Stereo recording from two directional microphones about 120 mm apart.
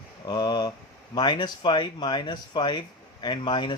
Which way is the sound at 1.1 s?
35° left (ahead or behind).